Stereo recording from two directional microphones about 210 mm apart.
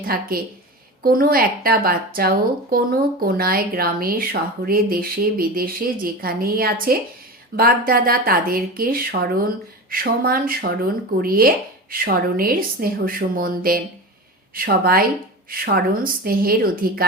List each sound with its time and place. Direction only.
0.0 s a woman's voice: 45° right (ahead or behind)